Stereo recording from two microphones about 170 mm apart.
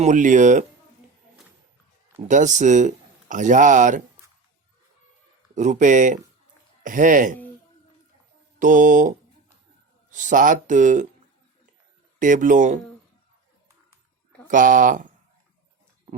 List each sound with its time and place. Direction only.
0.0 s speech: 45° right (ahead or behind)
2.2 s speech: 45° right (ahead or behind)
5.5 s speech: 45° right (ahead or behind)
8.5 s speech: 50° right (ahead or behind)
12.2 s speech: 50° right (ahead or behind)
14.4 s speech: 50° right (ahead or behind)